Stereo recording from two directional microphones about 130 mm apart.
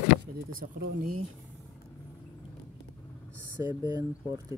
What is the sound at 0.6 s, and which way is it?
Speech, 90° right.